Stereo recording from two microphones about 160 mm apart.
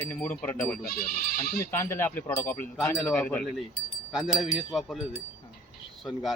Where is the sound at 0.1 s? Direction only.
10° left (ahead or behind).